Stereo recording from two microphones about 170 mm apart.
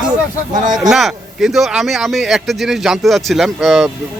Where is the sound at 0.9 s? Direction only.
Centre (ahead or behind).